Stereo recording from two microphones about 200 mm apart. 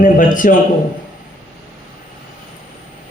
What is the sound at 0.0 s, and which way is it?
Speech, 40° left (ahead or behind).